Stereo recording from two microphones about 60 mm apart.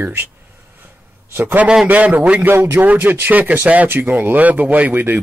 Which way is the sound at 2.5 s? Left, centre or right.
Right.